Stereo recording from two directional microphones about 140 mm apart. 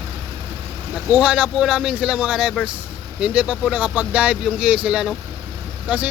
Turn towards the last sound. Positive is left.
turn(degrees=-10)  # may be behind; listen again after turning